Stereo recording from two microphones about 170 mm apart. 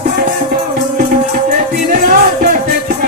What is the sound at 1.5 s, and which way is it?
Music, 50° right (ahead or behind).